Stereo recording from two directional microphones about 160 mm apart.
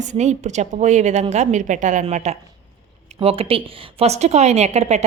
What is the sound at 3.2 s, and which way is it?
Speech, 35° right (ahead or behind).